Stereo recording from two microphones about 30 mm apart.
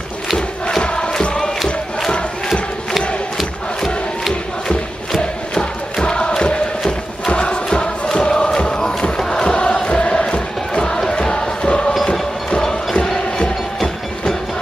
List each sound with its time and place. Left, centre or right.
0.8 s music: left
5.5 s music: left
9.6 s chant: left
11.1 s music: left